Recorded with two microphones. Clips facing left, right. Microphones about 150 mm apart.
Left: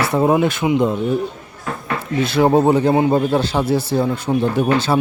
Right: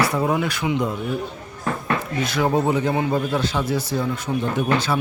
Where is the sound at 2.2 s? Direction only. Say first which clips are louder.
Left 8 dB; 30° left (ahead or behind).